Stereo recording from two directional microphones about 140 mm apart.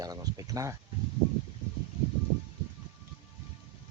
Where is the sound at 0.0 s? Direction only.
25° right (ahead or behind).